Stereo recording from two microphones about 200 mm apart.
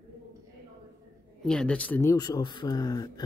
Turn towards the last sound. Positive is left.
turn(degrees=20)  # may be behind; listen again after turning